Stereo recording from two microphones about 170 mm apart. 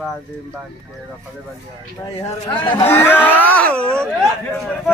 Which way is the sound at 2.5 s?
15° left (ahead or behind).